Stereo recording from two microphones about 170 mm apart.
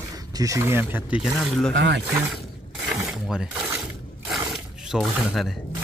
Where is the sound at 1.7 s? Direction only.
90° right.